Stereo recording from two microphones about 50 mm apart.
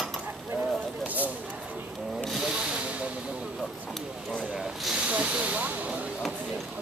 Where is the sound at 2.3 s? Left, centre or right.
Centre.